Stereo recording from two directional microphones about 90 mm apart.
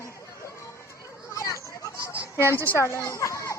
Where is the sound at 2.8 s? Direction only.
35° left (ahead or behind).